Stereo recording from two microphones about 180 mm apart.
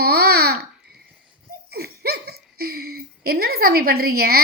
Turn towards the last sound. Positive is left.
turn(degrees=-60)  # may be behind; listen again after turning